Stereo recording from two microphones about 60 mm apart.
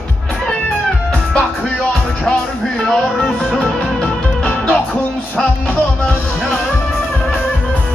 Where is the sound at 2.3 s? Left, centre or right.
Centre.